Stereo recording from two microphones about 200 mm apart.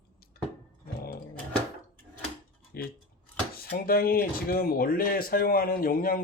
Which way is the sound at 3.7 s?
50° left (ahead or behind).